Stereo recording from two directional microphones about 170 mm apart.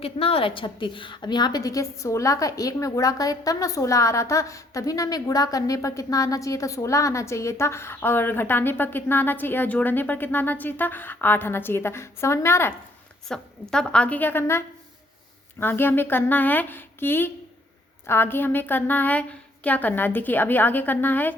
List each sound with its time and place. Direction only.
0.0 s a woman's voice: 35° left (ahead or behind); by 12.7 s 15° left (ahead or behind)
13.2 s a woman's voice: 5° left (ahead or behind)
15.6 s a woman's voice: 10° left (ahead or behind)